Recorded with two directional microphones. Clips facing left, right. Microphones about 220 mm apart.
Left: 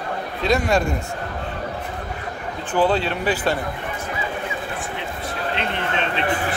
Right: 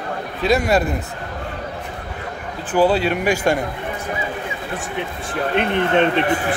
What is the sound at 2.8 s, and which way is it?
Speech, 10° right (ahead or behind).